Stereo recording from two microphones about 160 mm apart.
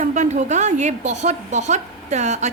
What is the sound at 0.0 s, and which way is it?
A woman's voice, 50° right (ahead or behind).